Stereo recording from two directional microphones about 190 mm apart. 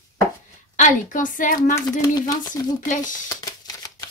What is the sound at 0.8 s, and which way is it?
Speech, 45° left (ahead or behind).